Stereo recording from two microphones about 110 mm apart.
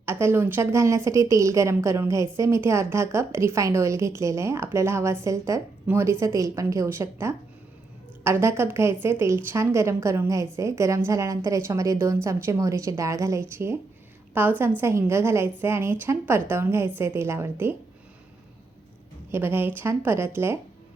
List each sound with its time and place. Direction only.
0.0 s a woman's voice: 20° right (ahead or behind)
19.3 s a woman's voice: 20° right (ahead or behind)